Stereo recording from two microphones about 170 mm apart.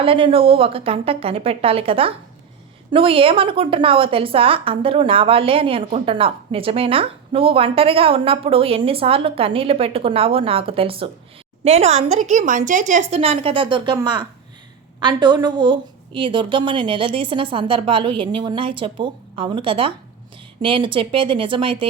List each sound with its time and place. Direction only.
0.0 s a woman's voice: 30° right (ahead or behind)